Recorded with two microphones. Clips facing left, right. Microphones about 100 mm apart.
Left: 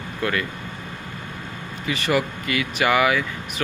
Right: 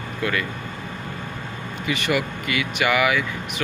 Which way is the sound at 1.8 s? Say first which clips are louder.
Left 1 dB; 35° left (ahead or behind).